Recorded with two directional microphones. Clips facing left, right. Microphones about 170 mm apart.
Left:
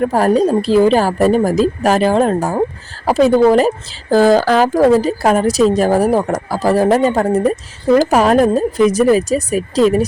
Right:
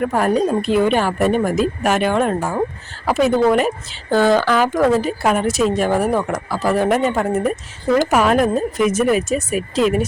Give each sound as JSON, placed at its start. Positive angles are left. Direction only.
{"t": 0.0, "sound": "a woman's voice", "side_deg": 35}